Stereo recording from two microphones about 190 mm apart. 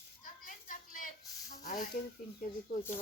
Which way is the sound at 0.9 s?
40° left (ahead or behind).